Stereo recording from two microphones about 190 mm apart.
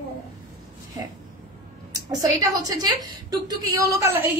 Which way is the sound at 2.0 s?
20° right (ahead or behind).